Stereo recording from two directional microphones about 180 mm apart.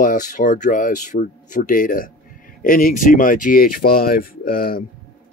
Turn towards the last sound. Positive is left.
turn(degrees=55)  # may be behind; listen again after turning